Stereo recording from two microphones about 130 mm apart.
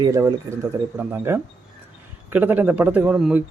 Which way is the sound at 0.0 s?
25° right (ahead or behind).